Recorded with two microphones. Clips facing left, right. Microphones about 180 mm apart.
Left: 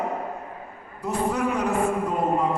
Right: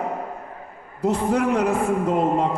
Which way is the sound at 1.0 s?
75° right (ahead or behind).